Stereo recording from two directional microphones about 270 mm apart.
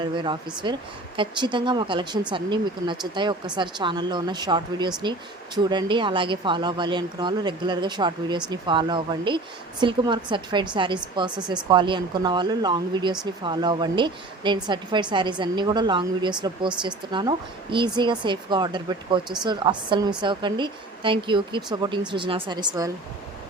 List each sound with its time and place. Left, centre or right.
0.0 s speech: centre